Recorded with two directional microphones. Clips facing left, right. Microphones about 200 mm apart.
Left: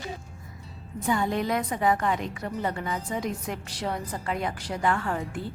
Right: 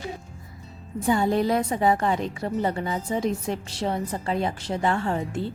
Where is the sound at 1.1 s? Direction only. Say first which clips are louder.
Right 4 dB; 30° right (ahead or behind).